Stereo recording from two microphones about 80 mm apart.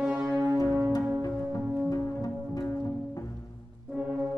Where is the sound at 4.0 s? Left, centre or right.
Centre.